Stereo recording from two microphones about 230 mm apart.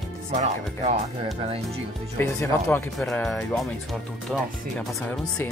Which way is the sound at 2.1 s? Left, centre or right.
Centre.